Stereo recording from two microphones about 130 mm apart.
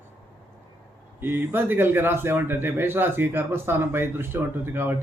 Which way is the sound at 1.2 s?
15° right (ahead or behind).